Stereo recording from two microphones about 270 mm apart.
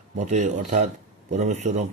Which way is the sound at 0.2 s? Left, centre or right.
Right.